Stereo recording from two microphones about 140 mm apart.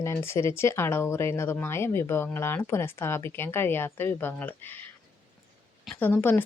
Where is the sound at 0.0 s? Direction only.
20° left (ahead or behind).